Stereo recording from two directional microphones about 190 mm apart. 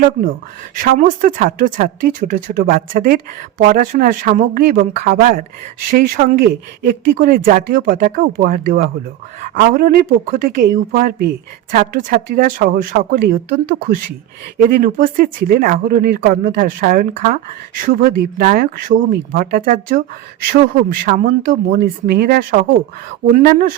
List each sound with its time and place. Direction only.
0.8 s speech: 45° right (ahead or behind)